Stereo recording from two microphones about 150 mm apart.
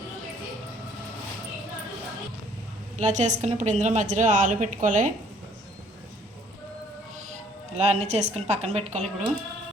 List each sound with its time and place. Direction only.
3.0 s a woman's voice: 55° right (ahead or behind)
7.3 s speech: 45° right (ahead or behind)